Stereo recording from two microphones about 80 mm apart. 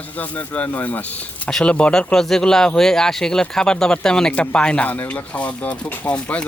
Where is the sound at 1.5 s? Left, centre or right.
Centre.